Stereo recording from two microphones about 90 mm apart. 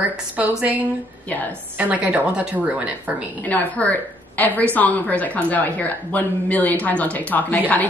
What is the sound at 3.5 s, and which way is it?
A woman's voice, 15° left (ahead or behind).